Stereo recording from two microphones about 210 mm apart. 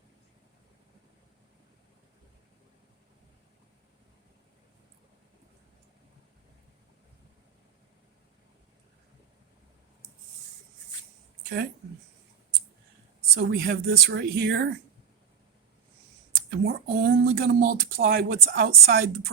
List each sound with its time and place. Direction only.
11.4 s speech: 50° right (ahead or behind)
13.3 s speech: 50° right (ahead or behind)
16.5 s speech: 45° right (ahead or behind)